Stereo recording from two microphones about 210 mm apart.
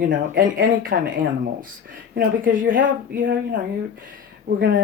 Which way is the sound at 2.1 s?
40° right (ahead or behind).